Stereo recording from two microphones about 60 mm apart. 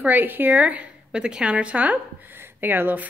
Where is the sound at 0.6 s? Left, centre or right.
Right.